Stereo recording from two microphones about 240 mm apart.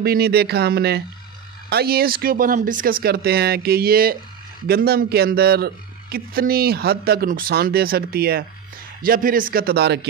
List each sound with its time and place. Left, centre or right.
0.0 s speech: right